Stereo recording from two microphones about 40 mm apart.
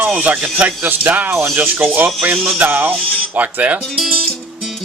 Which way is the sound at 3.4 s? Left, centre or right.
Right.